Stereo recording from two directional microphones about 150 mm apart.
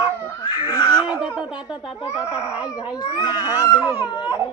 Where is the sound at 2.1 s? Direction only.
10° right (ahead or behind).